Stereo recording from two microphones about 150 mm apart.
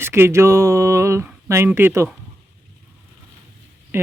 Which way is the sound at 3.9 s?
15° right (ahead or behind).